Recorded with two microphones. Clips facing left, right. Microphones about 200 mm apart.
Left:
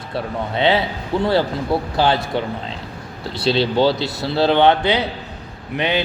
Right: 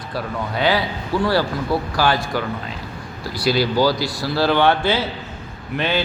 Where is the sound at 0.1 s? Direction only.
25° left (ahead or behind).